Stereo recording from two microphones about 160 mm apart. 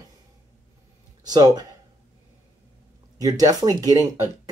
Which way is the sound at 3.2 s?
20° right (ahead or behind).